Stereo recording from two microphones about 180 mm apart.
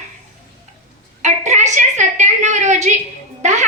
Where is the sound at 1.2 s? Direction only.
40° right (ahead or behind).